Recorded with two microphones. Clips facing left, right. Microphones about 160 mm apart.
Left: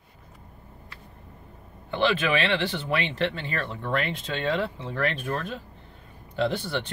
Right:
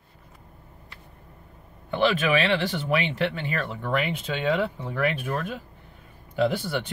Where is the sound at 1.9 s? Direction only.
10° right (ahead or behind).